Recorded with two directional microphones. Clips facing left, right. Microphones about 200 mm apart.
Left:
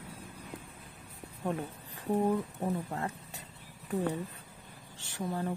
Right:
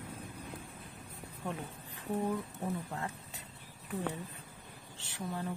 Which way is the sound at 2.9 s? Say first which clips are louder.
Left 4 dB; 40° left (ahead or behind).